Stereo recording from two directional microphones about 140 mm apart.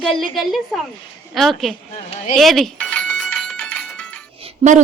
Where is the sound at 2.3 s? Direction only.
Centre (ahead or behind).